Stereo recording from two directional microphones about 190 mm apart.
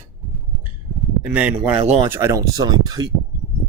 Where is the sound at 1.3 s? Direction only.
5° right (ahead or behind).